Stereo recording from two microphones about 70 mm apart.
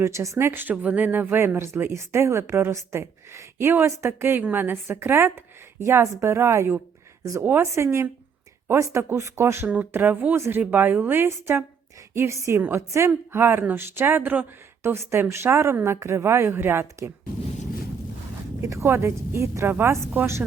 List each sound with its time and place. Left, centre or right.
0.0 s a woman's voice: right
4.4 s a woman's voice: right
9.9 s a woman's voice: right
13.1 s a woman's voice: right
14.9 s a woman's voice: right
18.6 s a woman's voice: right